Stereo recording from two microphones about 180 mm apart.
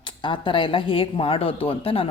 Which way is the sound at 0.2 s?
30° left (ahead or behind).